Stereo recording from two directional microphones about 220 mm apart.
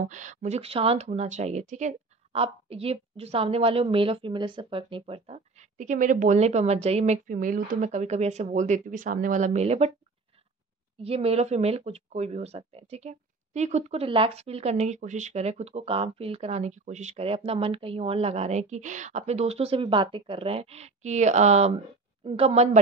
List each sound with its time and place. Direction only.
0.0 s speech: 35° right (ahead or behind)
11.0 s speech: 25° right (ahead or behind)